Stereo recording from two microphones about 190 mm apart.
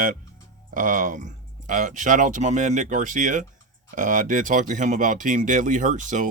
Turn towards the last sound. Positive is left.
turn(degrees=-40)  # may be behind; listen again after turning